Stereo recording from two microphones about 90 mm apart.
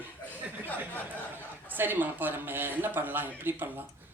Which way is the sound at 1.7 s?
20° right (ahead or behind).